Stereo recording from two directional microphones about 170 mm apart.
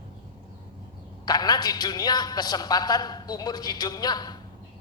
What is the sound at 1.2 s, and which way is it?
A woman's voice, 25° left (ahead or behind).